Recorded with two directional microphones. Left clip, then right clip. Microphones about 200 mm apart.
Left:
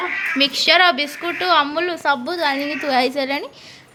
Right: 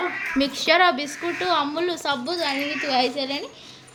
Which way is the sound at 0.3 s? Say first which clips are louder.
Left 4 dB; 10° right (ahead or behind).